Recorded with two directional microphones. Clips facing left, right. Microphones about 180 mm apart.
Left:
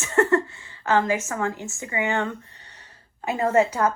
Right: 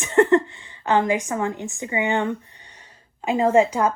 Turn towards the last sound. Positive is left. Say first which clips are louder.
# right 3 dB
turn(degrees=-15)  # may be behind; listen again after turning